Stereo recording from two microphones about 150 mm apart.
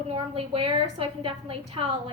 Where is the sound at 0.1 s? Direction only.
40° right (ahead or behind).